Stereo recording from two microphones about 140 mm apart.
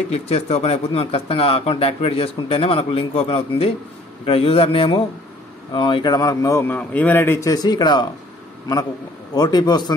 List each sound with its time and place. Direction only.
0.1 s a man's voice: 50° left (ahead or behind); by 8.1 s 30° left (ahead or behind)
9.3 s a man's voice: 30° left (ahead or behind)